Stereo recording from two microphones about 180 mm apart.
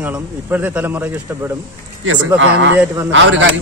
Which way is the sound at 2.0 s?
90° right.